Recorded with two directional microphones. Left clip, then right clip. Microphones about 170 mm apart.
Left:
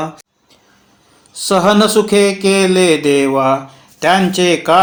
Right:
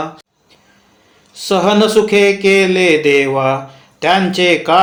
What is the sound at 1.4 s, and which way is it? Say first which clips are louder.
Speech: left 1 dB; 40° left (ahead or behind).